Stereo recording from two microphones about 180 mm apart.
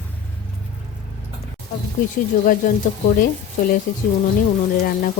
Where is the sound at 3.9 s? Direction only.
50° left (ahead or behind).